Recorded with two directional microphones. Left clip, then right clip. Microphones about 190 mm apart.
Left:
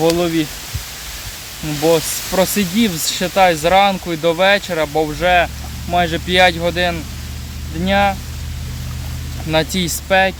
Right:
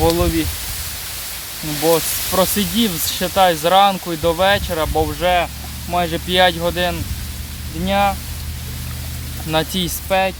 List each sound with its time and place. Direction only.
0.0 s speech: 15° left (ahead or behind)
1.8 s speech: 10° left (ahead or behind)
9.5 s speech: 10° left (ahead or behind)